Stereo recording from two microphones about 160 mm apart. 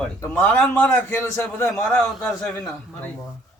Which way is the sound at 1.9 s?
5° left (ahead or behind).